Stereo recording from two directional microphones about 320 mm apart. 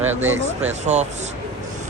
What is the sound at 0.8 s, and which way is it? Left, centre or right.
Speech, right.